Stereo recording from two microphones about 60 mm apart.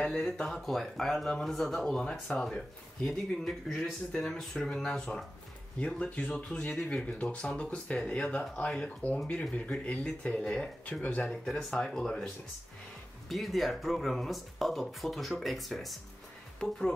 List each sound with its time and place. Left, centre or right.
0.0 s speech: centre
10.9 s speech: left
11.4 s speech: centre
13.3 s speech: centre